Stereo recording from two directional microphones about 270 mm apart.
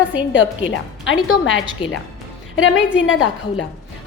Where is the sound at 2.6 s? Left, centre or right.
Left.